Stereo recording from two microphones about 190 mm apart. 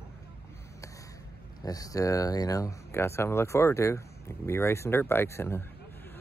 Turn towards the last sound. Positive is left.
turn(degrees=10)  # may be behind; listen again after turning